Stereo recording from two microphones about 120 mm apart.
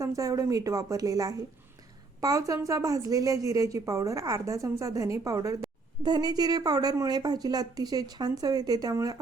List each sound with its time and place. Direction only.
0.0 s a woman's voice: 25° right (ahead or behind)